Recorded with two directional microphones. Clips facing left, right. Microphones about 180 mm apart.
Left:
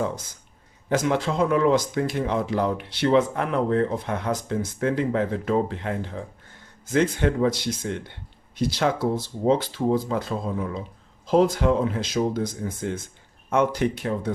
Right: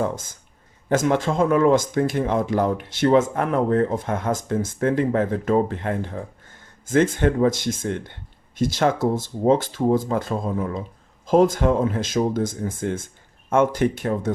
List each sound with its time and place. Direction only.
0.9 s speech: 50° right (ahead or behind)